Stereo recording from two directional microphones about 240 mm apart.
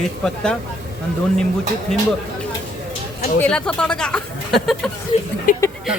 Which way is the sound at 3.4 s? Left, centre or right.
Centre.